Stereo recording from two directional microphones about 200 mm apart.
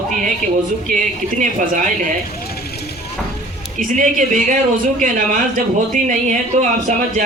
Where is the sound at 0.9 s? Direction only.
40° right (ahead or behind).